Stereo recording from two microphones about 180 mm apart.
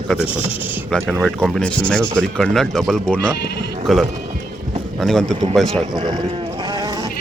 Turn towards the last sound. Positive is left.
turn(degrees=-20)  # may be behind; listen again after turning